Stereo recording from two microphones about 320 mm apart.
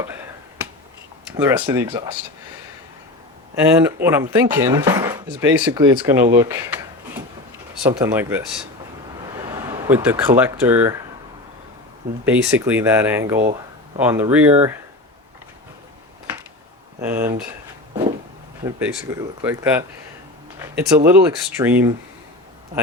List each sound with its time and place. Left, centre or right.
1.5 s speech: centre
3.5 s speech: centre
6.3 s a sound: centre
7.9 s speech: centre
9.5 s speech: centre
12.2 s speech: centre
13.4 s a sound: centre
14.0 s speech: centre
17.0 s speech: centre
18.6 s speech: centre